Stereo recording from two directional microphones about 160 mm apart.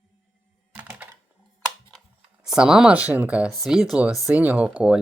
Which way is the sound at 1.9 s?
5° right (ahead or behind).